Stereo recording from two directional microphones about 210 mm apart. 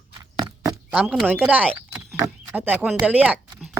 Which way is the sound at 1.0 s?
Centre (ahead or behind).